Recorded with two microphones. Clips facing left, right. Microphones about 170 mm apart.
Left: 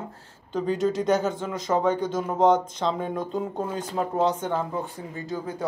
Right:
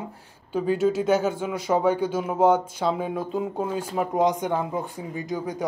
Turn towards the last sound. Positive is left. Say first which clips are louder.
# right 2 dB
turn(degrees=-15)  # may be behind; listen again after turning